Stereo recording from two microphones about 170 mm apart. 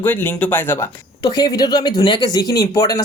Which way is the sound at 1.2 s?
25° left (ahead or behind).